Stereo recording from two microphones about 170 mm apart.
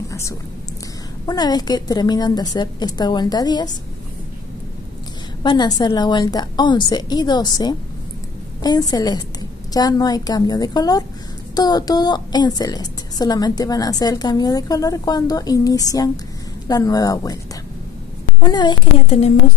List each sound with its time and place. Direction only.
0.1 s a sound: 15° left (ahead or behind)
1.2 s a woman's voice: 25° left (ahead or behind)
5.4 s a woman's voice: 25° left (ahead or behind)
18.5 s a woman's voice: 25° left (ahead or behind)